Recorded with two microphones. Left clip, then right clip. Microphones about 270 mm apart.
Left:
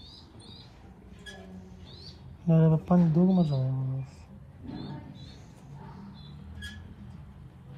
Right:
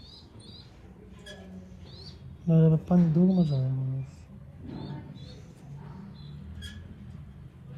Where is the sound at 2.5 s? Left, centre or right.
Left.